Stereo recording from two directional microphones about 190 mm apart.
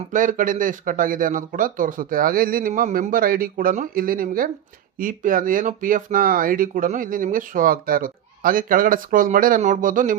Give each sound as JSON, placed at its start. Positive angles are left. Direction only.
{"t": 0.1, "sound": "speech", "side_deg": -45}